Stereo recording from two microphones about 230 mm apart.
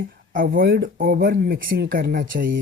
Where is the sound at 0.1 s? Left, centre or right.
Right.